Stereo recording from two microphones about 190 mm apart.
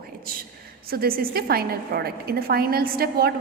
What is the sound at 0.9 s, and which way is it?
A woman's voice, 50° right (ahead or behind).